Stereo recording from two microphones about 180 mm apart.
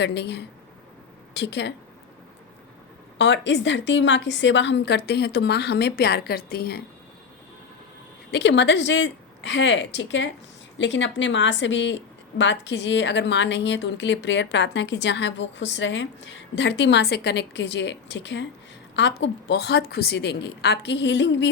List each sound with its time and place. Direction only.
0.0 s a woman's voice: 70° left (ahead or behind)
3.2 s a woman's voice: 90° left; by 6.8 s 60° left (ahead or behind)
8.3 s a woman's voice: 70° left (ahead or behind)